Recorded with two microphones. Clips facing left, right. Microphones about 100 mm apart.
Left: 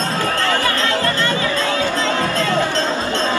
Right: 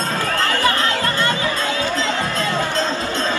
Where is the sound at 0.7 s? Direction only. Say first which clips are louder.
Left 1 dB; 20° right (ahead or behind).